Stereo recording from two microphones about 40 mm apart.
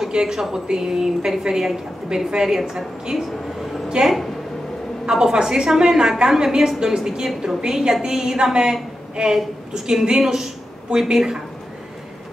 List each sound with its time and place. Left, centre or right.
0.1 s a woman's voice: centre